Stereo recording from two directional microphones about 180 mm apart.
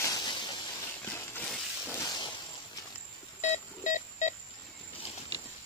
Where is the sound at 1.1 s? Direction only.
10° left (ahead or behind).